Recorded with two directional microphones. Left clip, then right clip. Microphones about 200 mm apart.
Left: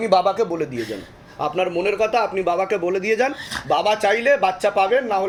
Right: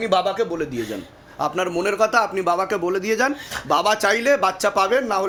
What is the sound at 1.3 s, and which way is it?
A man's voice, 40° right (ahead or behind).